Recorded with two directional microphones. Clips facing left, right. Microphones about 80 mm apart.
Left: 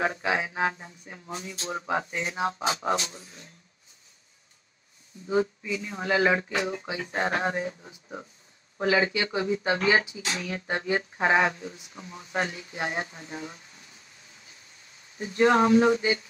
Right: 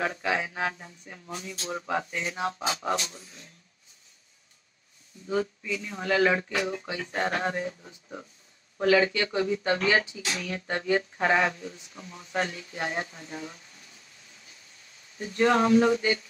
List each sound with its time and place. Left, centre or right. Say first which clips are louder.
0.0 s speech: left 1 dB; left
5.2 s speech: left 3 dB; centre
15.1 s speech: left 2 dB; centre